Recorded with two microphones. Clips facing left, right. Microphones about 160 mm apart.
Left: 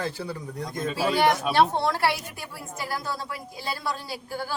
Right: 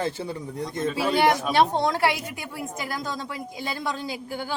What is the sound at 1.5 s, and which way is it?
A woman's voice, 15° right (ahead or behind).